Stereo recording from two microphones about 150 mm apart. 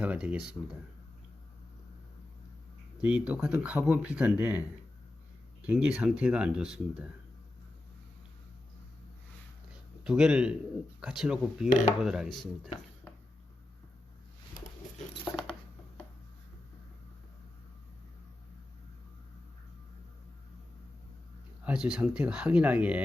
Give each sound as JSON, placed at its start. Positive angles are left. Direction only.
{"t": 0.0, "sound": "speech", "side_deg": -10}
{"t": 3.0, "sound": "speech", "side_deg": -5}
{"t": 5.6, "sound": "speech", "side_deg": -5}
{"t": 10.0, "sound": "speech", "side_deg": -5}
{"t": 11.7, "sound": "dishes", "side_deg": 55}
{"t": 12.0, "sound": "speech", "side_deg": -5}
{"t": 21.6, "sound": "speech", "side_deg": -5}